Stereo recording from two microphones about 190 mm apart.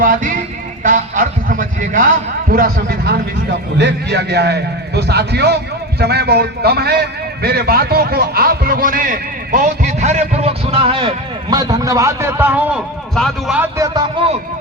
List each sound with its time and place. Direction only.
0.0 s music: 45° right (ahead or behind)
3.8 s a man's voice: 65° right (ahead or behind); by 12.8 s 10° right (ahead or behind)
13.1 s a man's voice: 5° left (ahead or behind)
13.6 s speech: 15° right (ahead or behind)